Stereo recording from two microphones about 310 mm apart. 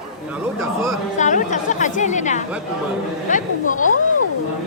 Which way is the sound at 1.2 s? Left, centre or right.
Left.